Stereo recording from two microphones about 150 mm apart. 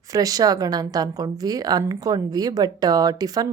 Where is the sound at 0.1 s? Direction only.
25° right (ahead or behind).